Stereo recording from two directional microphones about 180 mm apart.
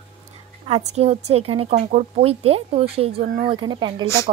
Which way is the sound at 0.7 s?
30° right (ahead or behind).